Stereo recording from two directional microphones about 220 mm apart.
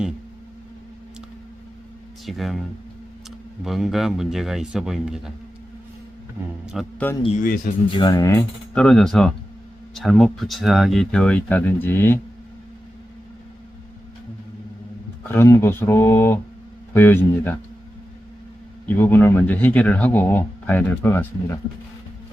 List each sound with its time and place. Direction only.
2.2 s speech: centre (ahead or behind)
3.6 s speech: centre (ahead or behind)
6.7 s speech: centre (ahead or behind)
7.2 s speech: 30° left (ahead or behind)
7.9 s speech: 20° left (ahead or behind)
15.3 s speech: 10° left (ahead or behind)
18.9 s speech: 10° left (ahead or behind)